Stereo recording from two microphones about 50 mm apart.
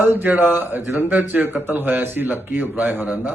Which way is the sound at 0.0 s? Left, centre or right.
Right.